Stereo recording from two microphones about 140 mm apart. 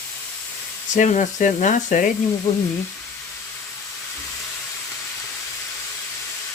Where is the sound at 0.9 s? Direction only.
60° left (ahead or behind).